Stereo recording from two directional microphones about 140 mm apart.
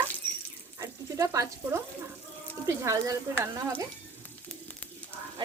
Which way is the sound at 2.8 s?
20° right (ahead or behind).